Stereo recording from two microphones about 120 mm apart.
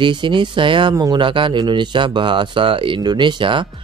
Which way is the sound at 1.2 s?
45° right (ahead or behind).